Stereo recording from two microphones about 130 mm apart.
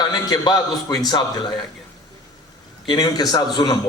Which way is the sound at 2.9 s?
30° left (ahead or behind).